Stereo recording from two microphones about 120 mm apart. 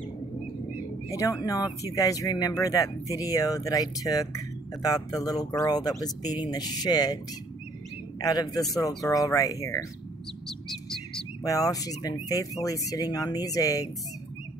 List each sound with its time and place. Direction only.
1.1 s speech: 30° left (ahead or behind)
8.2 s speech: 30° left (ahead or behind)
11.4 s speech: 30° left (ahead or behind)